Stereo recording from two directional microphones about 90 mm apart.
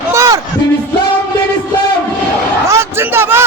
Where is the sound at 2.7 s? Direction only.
25° right (ahead or behind).